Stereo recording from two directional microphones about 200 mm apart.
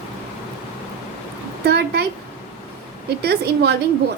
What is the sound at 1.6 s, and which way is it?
Speech, 55° right (ahead or behind).